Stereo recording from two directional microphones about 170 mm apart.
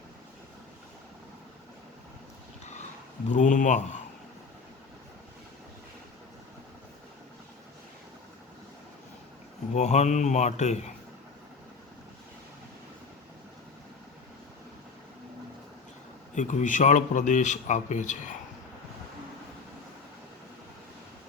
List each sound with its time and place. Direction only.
3.3 s speech: 45° left (ahead or behind)
9.7 s speech: 40° left (ahead or behind)
16.3 s speech: 45° left (ahead or behind)